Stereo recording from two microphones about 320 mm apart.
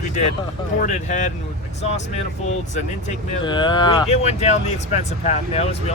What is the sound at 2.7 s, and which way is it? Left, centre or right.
Speech, centre.